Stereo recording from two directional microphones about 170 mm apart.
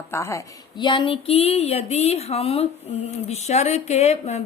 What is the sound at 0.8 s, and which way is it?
Speech, 30° left (ahead or behind).